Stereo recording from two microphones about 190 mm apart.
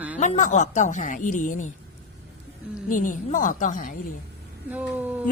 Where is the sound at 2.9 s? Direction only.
45° left (ahead or behind).